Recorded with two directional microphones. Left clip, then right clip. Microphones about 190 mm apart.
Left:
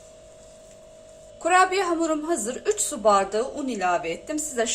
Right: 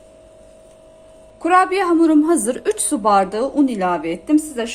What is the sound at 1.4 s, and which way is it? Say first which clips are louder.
A woman's voice: right 5 dB; 30° right (ahead or behind).